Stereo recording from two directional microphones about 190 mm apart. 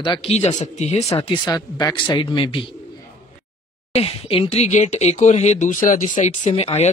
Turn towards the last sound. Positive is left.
turn(degrees=35)  # may be behind; listen again after turning